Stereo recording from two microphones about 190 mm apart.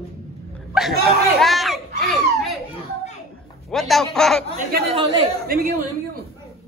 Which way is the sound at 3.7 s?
Centre (ahead or behind).